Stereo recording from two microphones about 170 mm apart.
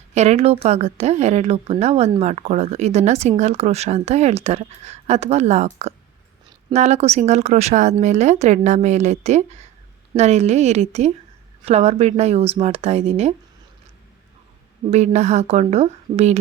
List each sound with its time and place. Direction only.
0.1 s speech: 40° right (ahead or behind)
14.8 s speech: 40° right (ahead or behind)